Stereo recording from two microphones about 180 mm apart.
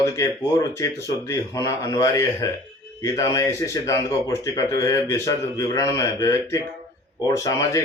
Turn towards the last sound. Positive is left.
turn(degrees=20)  # may be behind; listen again after turning